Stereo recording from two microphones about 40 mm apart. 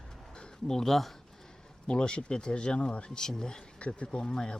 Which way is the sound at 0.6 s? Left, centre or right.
Centre.